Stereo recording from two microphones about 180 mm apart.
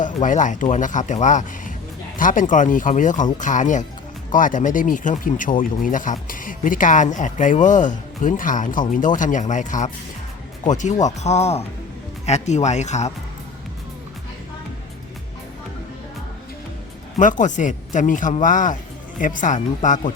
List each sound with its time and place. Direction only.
0.0 s speech: 45° left (ahead or behind)
17.2 s speech: 45° left (ahead or behind)